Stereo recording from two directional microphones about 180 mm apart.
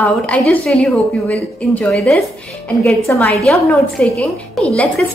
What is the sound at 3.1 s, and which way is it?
Speech, 15° left (ahead or behind).